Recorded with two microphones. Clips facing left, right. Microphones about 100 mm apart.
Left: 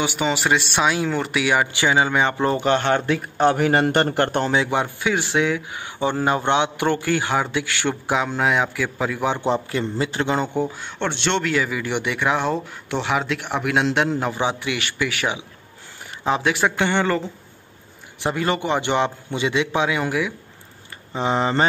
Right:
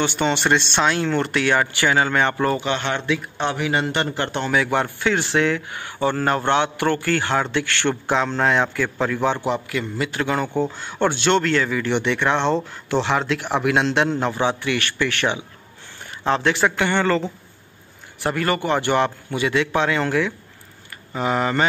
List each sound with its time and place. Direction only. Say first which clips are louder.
0.0 s speech: right 1 dB; 5° left (ahead or behind)
2.6 s a man's voice: left 5 dB; 40° left (ahead or behind)
4.5 s speech: even; 20° left (ahead or behind)
9.5 s a man's voice: left 2 dB; 30° left (ahead or behind); by 10.8 s 15° left (ahead or behind)
10.8 s speech: right 4 dB; 5° right (ahead or behind)
11.5 s speech: right 2 dB; 10° left (ahead or behind)
18.2 s speech: even; 20° left (ahead or behind)
21.1 s a man's voice: even; 25° left (ahead or behind)